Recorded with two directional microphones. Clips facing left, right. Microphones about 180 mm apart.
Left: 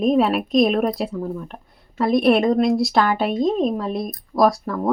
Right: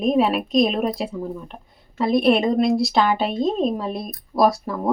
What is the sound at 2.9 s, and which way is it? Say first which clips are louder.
Speech: left 1 dB; 20° right (ahead or behind).